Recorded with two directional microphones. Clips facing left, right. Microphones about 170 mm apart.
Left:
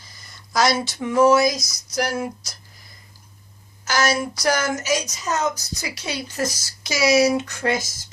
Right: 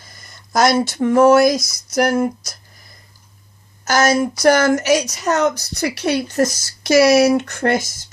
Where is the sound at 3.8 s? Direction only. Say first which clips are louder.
Right 6 dB; 45° right (ahead or behind).